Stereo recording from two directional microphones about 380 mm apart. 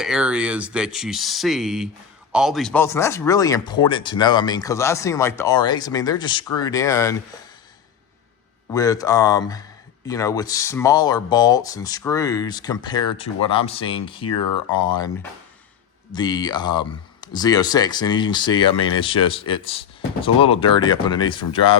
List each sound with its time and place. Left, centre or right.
0.0 s speech: centre
8.7 s speech: centre
14.3 s speech: left
14.8 s speech: centre